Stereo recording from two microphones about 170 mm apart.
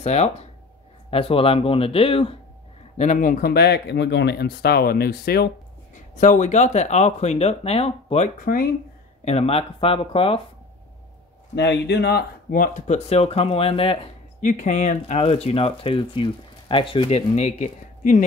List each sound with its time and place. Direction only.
0.0 s speech: 40° left (ahead or behind)
3.0 s speech: 50° left (ahead or behind); by 5.5 s 65° left (ahead or behind)
6.1 s speech: 45° left (ahead or behind)
11.5 s speech: 90° left; by 13.9 s 35° left (ahead or behind)
14.4 s speech: 45° left (ahead or behind)